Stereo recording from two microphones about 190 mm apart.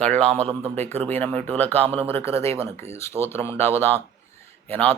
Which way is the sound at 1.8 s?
30° right (ahead or behind).